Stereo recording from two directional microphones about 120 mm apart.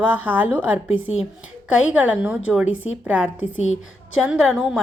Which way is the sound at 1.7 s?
10° right (ahead or behind).